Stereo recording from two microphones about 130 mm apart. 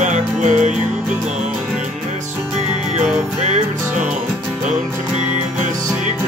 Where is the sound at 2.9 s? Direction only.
65° right (ahead or behind).